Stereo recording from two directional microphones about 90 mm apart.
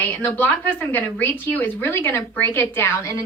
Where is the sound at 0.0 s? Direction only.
20° left (ahead or behind).